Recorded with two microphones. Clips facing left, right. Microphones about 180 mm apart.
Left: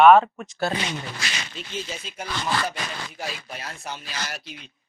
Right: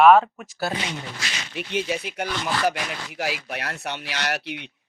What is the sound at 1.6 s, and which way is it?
Speech, 65° right (ahead or behind).